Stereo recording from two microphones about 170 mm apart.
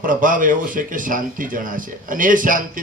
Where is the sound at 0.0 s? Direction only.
50° right (ahead or behind).